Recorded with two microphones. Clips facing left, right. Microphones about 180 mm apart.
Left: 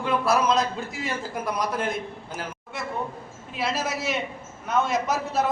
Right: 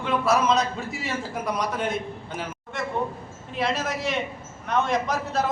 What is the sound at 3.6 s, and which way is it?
A man's voice, 5° left (ahead or behind).